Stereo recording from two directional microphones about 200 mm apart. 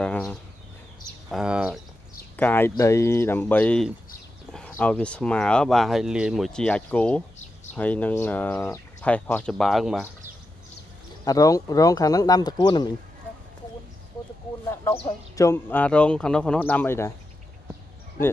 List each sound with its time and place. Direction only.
0.0 s a sound: 5° left (ahead or behind)
2.3 s speech: 10° left (ahead or behind)
11.2 s speech: 15° left (ahead or behind)
14.7 s speech: 15° left (ahead or behind)